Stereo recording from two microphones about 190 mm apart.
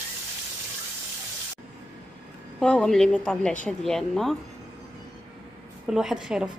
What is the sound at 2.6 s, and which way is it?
A woman's voice, 5° left (ahead or behind).